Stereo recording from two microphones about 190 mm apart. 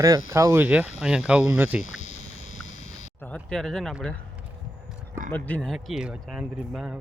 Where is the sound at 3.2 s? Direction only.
5° left (ahead or behind).